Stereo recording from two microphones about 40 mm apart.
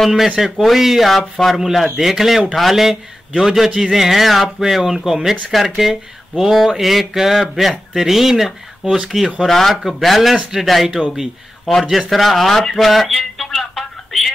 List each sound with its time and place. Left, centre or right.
0.0 s a man's voice: centre
8.8 s speech: right
9.1 s speech: centre
9.5 s speech: centre
12.1 s a sound: centre